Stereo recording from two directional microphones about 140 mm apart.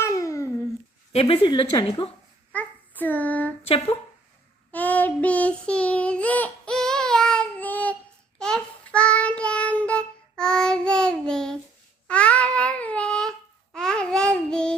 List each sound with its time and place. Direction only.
0.0 s a sound: 20° left (ahead or behind)
1.1 s speech: 40° left (ahead or behind)
2.5 s child singing: 10° left (ahead or behind)
3.6 s speech: 45° left (ahead or behind)
4.7 s child singing: 10° left (ahead or behind)
12.0 s babbling: 10° left (ahead or behind)
13.7 s child singing: 5° left (ahead or behind)